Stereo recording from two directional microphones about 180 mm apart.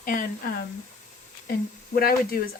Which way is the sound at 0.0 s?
50° left (ahead or behind).